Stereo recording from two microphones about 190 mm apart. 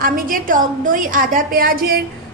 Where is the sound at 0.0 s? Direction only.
50° right (ahead or behind).